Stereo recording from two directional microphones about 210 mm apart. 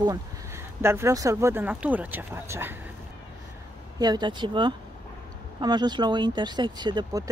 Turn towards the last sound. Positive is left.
turn(degrees=-20)  # may be behind; listen again after turning